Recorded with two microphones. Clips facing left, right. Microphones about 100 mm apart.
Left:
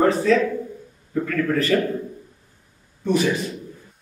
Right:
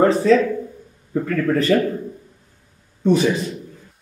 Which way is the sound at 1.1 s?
30° right (ahead or behind).